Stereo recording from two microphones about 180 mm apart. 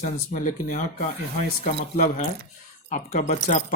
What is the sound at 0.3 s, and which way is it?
Speech, 50° left (ahead or behind).